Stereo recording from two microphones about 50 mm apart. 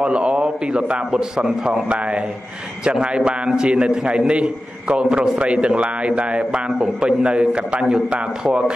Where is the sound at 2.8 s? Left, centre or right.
Centre.